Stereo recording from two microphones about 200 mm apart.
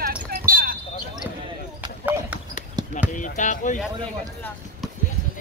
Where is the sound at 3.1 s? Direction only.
40° left (ahead or behind).